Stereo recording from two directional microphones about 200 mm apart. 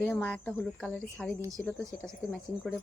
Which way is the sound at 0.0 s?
10° left (ahead or behind).